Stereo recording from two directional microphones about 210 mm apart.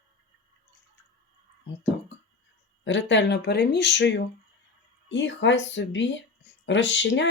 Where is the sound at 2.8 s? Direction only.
60° left (ahead or behind).